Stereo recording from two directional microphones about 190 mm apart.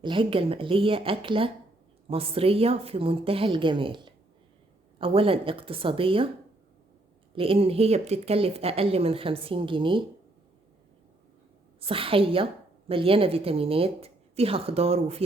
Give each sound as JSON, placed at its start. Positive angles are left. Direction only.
{"t": 0.0, "sound": "a woman's voice", "side_deg": -25}
{"t": 7.3, "sound": "a woman's voice", "side_deg": -30}
{"t": 11.8, "sound": "a woman's voice", "side_deg": -30}